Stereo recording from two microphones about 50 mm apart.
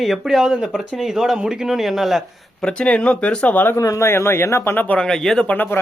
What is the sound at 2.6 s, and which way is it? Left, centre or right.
Speech, left.